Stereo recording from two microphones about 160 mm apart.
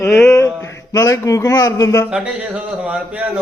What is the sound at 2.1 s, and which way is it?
Speech, 5° right (ahead or behind).